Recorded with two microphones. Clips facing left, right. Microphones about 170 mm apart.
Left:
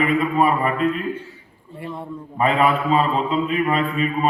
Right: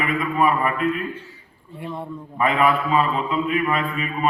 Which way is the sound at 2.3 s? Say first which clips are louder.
Left 1 dB; 30° left (ahead or behind).